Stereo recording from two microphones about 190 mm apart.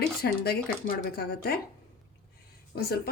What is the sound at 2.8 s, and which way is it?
Cutlery, 55° left (ahead or behind).